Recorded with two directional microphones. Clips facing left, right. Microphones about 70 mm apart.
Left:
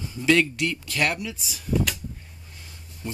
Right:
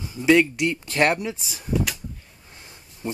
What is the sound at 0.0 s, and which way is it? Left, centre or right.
Speech, centre.